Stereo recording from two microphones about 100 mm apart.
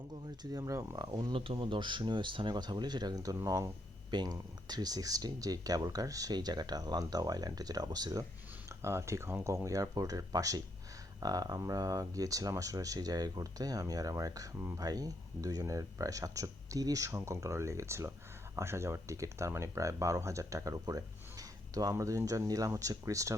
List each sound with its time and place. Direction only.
0.5 s speech: 35° right (ahead or behind)
1.0 s speech: 45° right (ahead or behind)
1.3 s speech: 60° right (ahead or behind); by 3.3 s 45° right (ahead or behind)
3.3 s speech: 35° right (ahead or behind)
4.1 s speech: 45° right (ahead or behind)
8.8 s speech: 30° right (ahead or behind)